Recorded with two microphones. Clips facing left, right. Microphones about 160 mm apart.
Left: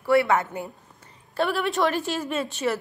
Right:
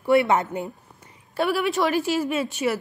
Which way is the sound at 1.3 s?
10° right (ahead or behind).